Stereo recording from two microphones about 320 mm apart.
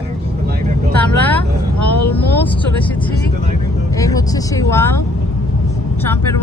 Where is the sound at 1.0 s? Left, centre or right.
Centre.